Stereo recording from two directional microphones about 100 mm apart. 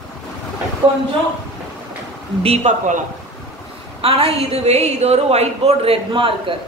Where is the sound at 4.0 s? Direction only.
75° right (ahead or behind).